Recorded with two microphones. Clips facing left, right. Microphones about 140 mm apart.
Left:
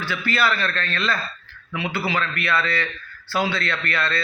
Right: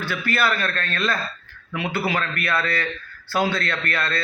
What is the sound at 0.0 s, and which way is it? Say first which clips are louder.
Speech: even; 50° right (ahead or behind).